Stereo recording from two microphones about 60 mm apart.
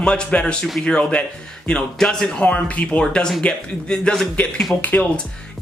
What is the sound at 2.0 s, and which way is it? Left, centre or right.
Speech, centre.